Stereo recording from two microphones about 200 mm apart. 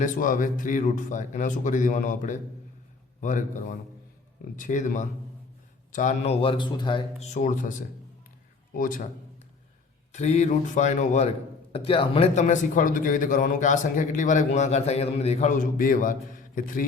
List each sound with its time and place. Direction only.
0.0 s a man's voice: 40° left (ahead or behind)
6.4 s speech: 25° left (ahead or behind); by 9.0 s 45° left (ahead or behind)
10.1 s a man's voice: 35° left (ahead or behind)